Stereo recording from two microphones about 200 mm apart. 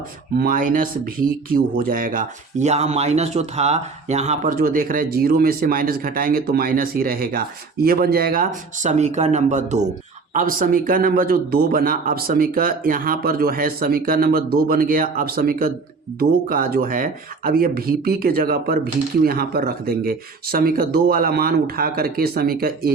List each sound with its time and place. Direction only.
0.3 s speech: 45° right (ahead or behind)